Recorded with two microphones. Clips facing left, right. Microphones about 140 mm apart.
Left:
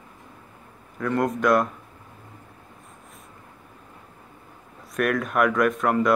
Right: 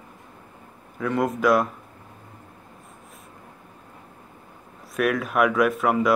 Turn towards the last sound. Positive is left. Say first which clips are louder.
# even
turn(degrees=-5)  # may be behind; listen again after turning